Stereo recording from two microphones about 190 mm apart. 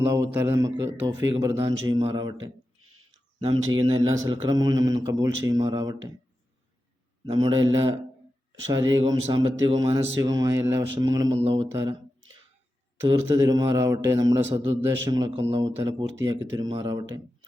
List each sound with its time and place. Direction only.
0.0 s a man's voice: 15° right (ahead or behind)
2.8 s a sound: 90° right
3.5 s speech: 90° right
3.8 s a man's voice: 25° right (ahead or behind)
7.3 s a man's voice: 25° right (ahead or behind)
11.3 s a man's voice: 30° right (ahead or behind)
13.2 s a man's voice: 20° right (ahead or behind)